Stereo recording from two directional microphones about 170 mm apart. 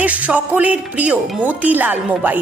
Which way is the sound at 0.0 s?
10° right (ahead or behind).